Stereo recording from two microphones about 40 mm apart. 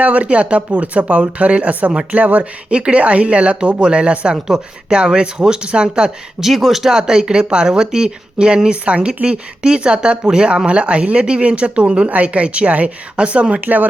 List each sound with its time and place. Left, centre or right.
0.0 s speech: right
6.4 s speech: centre
6.9 s speech: centre